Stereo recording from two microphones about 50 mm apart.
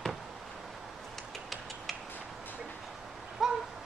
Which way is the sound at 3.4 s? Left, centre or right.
Centre.